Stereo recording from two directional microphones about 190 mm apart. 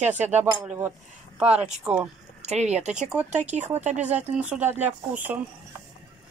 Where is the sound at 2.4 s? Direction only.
35° right (ahead or behind).